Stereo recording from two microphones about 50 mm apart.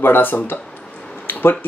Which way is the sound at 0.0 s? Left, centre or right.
Left.